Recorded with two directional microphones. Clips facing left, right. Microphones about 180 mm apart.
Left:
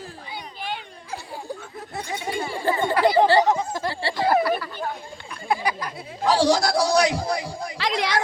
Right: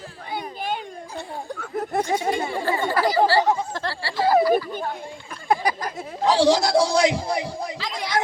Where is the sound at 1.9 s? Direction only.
55° right (ahead or behind).